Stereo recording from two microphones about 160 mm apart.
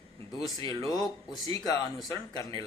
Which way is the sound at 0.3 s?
25° left (ahead or behind).